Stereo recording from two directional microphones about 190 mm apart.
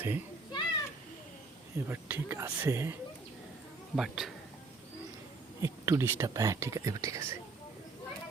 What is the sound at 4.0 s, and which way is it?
Speech, centre (ahead or behind).